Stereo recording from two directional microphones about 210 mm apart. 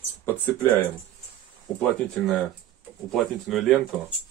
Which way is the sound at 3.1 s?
Centre (ahead or behind).